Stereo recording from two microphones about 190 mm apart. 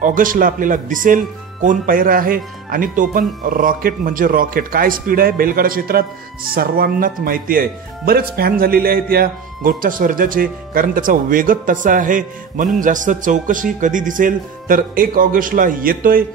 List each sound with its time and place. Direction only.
0.0 s speech: 45° right (ahead or behind)